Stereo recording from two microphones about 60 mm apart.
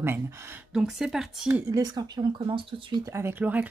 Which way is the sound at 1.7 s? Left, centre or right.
Right.